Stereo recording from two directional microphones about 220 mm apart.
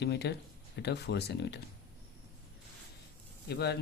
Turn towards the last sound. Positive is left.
turn(degrees=50)  # may be behind; listen again after turning